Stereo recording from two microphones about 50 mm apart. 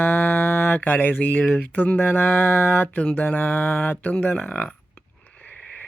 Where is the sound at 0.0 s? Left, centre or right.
Left.